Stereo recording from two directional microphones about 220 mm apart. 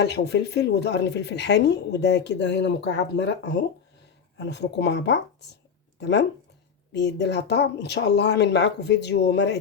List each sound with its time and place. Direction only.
0.0 s a woman's voice: 50° left (ahead or behind)